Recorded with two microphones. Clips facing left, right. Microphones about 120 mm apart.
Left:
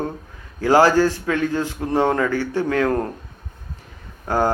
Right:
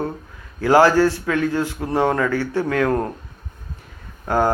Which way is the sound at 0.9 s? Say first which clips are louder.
Right 1 dB; 20° left (ahead or behind).